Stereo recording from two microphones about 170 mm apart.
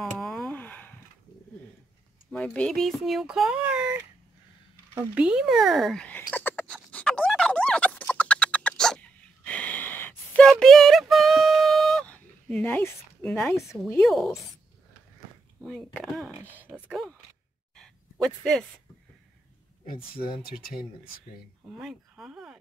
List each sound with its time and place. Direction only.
0.0 s a sound: centre (ahead or behind)
2.3 s speech: 5° left (ahead or behind)
4.9 s a sound: 10° right (ahead or behind); by 13.7 s 15° left (ahead or behind)
14.0 s speech: centre (ahead or behind)
15.6 s speech: 5° left (ahead or behind)
16.6 s speech: 10° right (ahead or behind)
17.7 s a sound: 5° left (ahead or behind)
20.4 s speech: 60° left (ahead or behind)
21.6 s speech: 5° right (ahead or behind)